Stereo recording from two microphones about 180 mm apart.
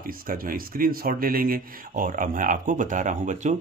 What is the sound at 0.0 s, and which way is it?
Speech, 50° right (ahead or behind).